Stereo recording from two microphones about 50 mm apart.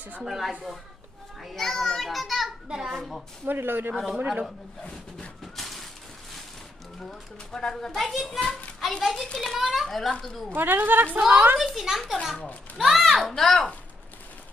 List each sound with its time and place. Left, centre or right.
0.2 s a woman's voice: centre
2.9 s a woman's voice: centre
3.4 s speech: right
3.9 s a woman's voice: centre
5.5 s a sound: centre
7.0 s a woman's voice: centre
8.4 s a child's voice: left
8.8 s a woman's voice: centre
9.6 s a woman's voice: centre
10.1 s speech: centre
10.5 s a woman's voice: right
11.2 s a woman's voice: centre
11.5 s a woman's voice: centre
13.3 s speech: centre